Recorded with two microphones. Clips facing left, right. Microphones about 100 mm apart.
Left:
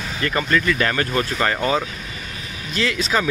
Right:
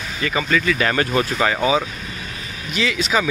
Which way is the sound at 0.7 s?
20° right (ahead or behind).